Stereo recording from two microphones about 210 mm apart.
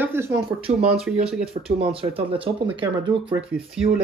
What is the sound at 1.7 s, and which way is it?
Speech, 25° right (ahead or behind).